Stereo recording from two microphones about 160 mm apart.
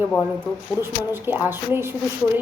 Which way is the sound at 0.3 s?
15° right (ahead or behind).